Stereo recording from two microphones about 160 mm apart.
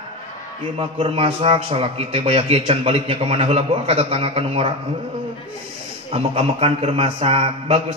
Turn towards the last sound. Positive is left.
turn(degrees=-40)  # may be behind; listen again after turning